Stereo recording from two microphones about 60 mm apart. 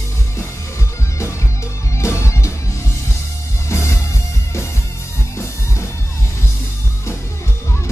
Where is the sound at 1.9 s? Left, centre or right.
Left.